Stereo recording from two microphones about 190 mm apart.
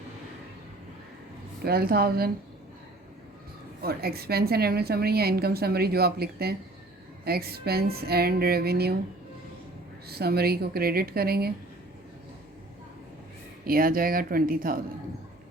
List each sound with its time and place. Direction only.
1.6 s speech: 55° right (ahead or behind)
3.8 s a woman's voice: 55° right (ahead or behind)
10.1 s speech: 55° right (ahead or behind)
13.7 s speech: 50° right (ahead or behind)